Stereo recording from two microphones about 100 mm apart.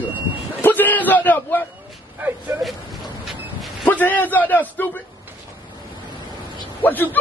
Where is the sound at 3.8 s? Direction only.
20° left (ahead or behind).